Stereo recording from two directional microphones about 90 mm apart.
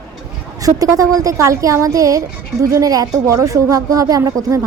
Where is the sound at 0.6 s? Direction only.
40° right (ahead or behind).